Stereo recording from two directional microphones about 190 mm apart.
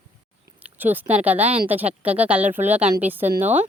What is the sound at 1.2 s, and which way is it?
A woman's voice, 10° right (ahead or behind).